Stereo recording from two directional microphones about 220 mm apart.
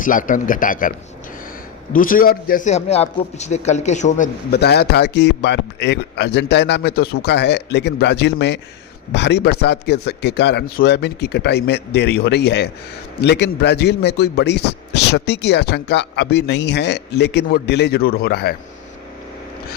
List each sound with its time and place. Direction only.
0.0 s a man's voice: 35° left (ahead or behind)
4.5 s a man's voice: 45° left (ahead or behind)